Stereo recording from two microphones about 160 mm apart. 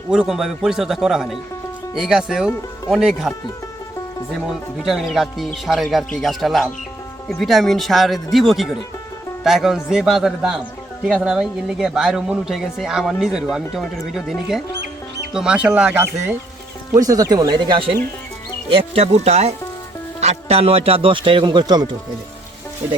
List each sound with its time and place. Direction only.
0.1 s speech: 5° right (ahead or behind)
4.4 s speech: 5° right (ahead or behind); by 21.8 s 25° right (ahead or behind)